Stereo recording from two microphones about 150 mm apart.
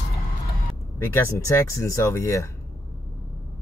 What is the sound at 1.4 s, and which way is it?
Speech, 20° left (ahead or behind).